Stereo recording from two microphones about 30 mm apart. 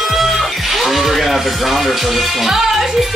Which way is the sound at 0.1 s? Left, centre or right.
Centre.